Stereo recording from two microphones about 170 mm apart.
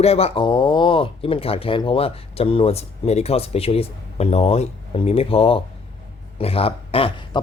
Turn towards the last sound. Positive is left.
turn(degrees=35)  # may be behind; listen again after turning